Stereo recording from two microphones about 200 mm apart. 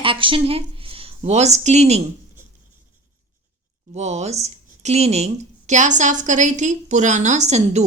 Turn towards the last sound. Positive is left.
turn(degrees=-35)  # may be behind; listen again after turning